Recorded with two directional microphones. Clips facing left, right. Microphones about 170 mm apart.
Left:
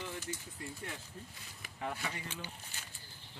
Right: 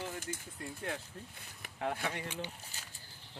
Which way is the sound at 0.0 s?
50° right (ahead or behind).